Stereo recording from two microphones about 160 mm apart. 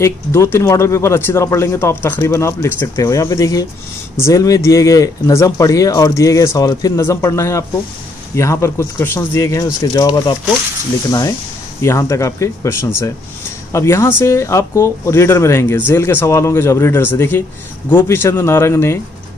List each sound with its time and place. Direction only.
0.0 s speech: 15° left (ahead or behind)